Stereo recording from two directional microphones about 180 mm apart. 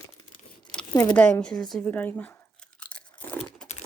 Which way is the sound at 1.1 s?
5° left (ahead or behind).